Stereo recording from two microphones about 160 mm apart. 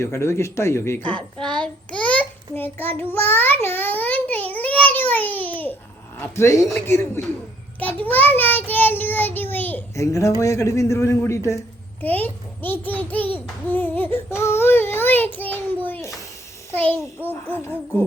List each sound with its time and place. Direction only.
0.0 s a sound: 15° left (ahead or behind)
6.1 s a man's voice: 15° left (ahead or behind)
8.0 s child singing: 10° left (ahead or behind)
10.4 s a man's voice: 20° left (ahead or behind)
13.3 s child singing: 10° left (ahead or behind)
17.2 s a man's voice: 10° left (ahead or behind)